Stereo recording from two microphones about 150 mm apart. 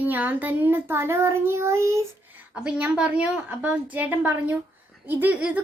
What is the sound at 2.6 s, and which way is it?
A child's voice, 10° right (ahead or behind).